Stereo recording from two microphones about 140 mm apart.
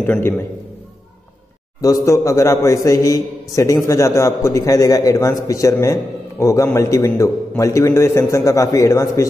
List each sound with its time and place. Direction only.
0.0 s a man's voice: 15° left (ahead or behind)
1.8 s a man's voice: 25° left (ahead or behind)